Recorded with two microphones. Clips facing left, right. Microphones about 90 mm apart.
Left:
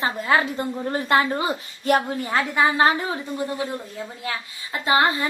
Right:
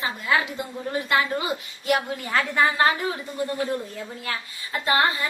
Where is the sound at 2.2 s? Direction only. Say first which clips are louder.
Right 1 dB; 20° left (ahead or behind).